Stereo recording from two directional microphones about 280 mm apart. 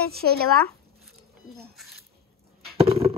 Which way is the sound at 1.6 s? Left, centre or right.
Centre.